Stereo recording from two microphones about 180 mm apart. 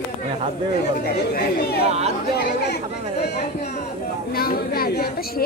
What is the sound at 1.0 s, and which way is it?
Speech, 60° left (ahead or behind).